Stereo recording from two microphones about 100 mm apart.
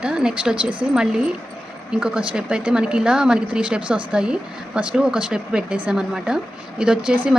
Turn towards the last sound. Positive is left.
turn(degrees=-10)  # may be behind; listen again after turning